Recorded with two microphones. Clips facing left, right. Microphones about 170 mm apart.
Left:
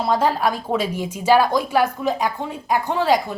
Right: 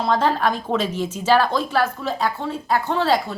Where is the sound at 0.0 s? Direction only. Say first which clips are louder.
Even; 10° left (ahead or behind).